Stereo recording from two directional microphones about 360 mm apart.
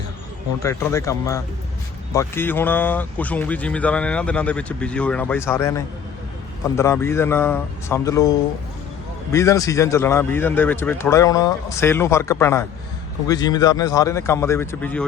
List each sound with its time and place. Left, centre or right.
0.6 s a man's voice: centre